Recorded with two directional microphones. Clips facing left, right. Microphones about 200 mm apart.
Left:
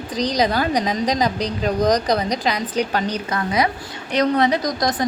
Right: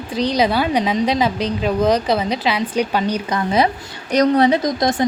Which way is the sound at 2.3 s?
40° left (ahead or behind).